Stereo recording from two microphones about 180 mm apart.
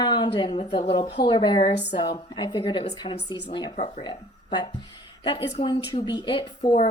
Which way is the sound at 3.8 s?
40° left (ahead or behind).